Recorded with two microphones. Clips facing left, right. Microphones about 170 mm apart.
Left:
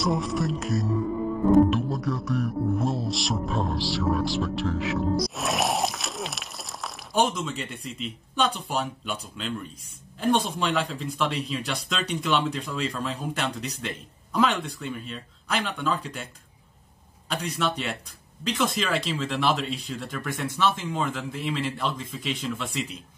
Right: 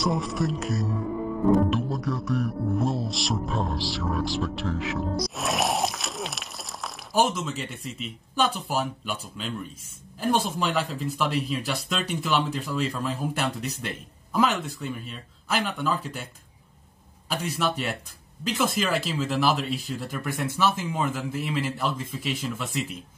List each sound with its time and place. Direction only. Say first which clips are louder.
0.0 s speech: even; centre (ahead or behind)
17.3 s speech: right 1 dB; 5° right (ahead or behind)